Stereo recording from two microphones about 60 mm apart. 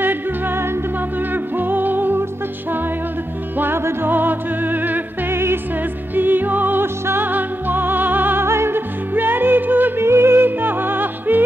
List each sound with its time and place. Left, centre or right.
0.0 s music: right
3.5 s music: right
8.5 s music: right
10.0 s music: right